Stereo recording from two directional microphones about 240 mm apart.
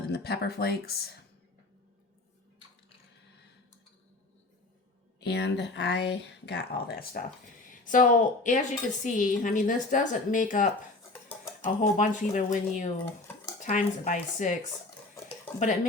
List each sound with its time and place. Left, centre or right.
0.1 s a woman's voice: left
5.2 s a woman's voice: left